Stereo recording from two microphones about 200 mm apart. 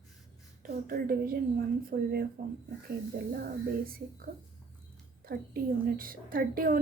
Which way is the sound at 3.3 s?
45° right (ahead or behind).